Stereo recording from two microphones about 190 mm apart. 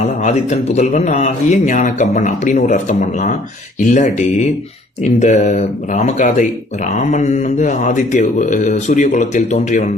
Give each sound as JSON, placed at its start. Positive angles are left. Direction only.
{"t": 0.0, "sound": "a man's voice", "side_deg": 35}